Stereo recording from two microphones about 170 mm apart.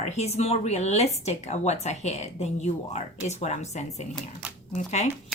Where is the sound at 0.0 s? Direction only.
40° left (ahead or behind).